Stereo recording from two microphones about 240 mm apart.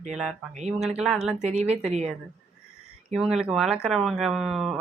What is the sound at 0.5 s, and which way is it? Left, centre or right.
Speech, right.